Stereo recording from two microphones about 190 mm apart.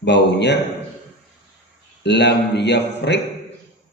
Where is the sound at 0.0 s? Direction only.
65° left (ahead or behind).